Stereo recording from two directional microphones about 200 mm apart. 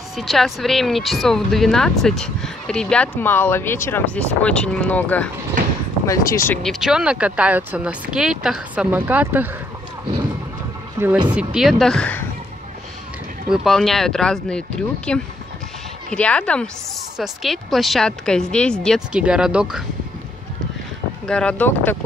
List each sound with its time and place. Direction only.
0.1 s speech: centre (ahead or behind)
6.6 s speech: centre (ahead or behind)
11.2 s speech: 5° right (ahead or behind)
13.5 s speech: centre (ahead or behind)
21.3 s speech: 5° left (ahead or behind)